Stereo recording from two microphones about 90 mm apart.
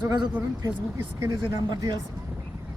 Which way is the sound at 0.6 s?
30° right (ahead or behind).